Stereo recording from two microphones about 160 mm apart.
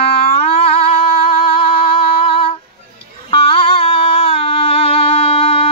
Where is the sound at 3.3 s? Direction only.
35° left (ahead or behind).